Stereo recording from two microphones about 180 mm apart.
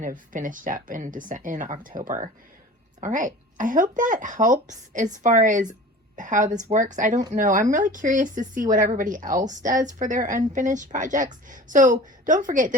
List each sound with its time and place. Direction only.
0.0 s a woman's voice: 45° right (ahead or behind)